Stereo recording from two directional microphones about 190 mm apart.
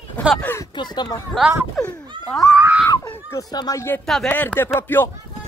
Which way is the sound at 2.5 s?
10° right (ahead or behind).